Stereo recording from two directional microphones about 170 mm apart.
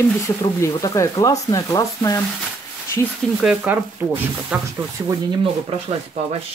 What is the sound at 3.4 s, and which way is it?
Speech, 10° right (ahead or behind).